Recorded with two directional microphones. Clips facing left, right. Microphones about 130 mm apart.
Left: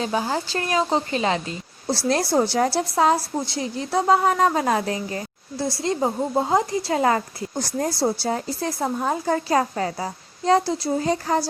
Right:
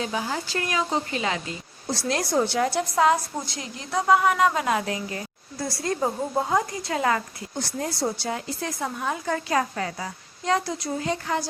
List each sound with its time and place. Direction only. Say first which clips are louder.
0.0 s a woman's voice: left 4 dB; 35° left (ahead or behind)